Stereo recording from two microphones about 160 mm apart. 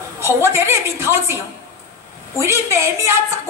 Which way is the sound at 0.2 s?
15° right (ahead or behind).